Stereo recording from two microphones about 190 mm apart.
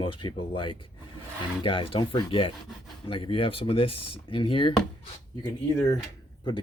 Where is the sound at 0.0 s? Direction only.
25° left (ahead or behind).